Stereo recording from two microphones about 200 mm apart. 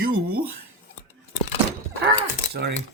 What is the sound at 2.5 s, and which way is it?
Speech, 55° right (ahead or behind).